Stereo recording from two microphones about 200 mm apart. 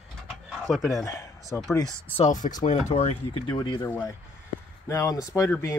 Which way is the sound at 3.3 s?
25° left (ahead or behind).